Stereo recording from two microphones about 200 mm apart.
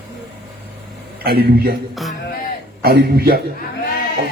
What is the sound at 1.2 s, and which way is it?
Speech, 50° right (ahead or behind).